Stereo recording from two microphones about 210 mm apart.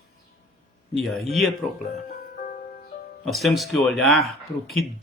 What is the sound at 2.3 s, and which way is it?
Music, 45° left (ahead or behind).